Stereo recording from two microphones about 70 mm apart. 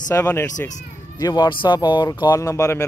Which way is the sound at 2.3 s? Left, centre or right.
Left.